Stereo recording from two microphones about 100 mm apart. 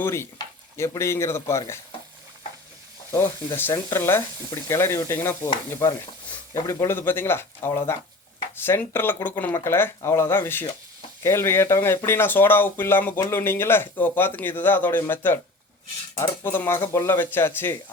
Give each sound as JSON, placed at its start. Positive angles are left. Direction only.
{"t": 0.0, "sound": "speech", "side_deg": 25}
{"t": 3.1, "sound": "speech", "side_deg": 25}
{"t": 6.5, "sound": "speech", "side_deg": 30}
{"t": 16.4, "sound": "speech", "side_deg": 20}